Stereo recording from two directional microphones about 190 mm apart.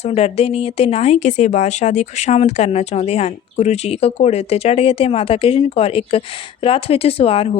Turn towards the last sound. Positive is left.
turn(degrees=30)  # may be behind; listen again after turning